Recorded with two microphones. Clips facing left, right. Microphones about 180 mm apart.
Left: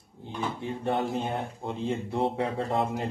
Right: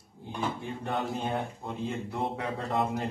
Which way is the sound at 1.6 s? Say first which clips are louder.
Left 3 dB; 25° left (ahead or behind).